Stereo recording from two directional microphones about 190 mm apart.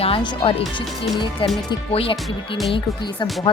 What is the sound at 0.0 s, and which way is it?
Speech, 25° left (ahead or behind).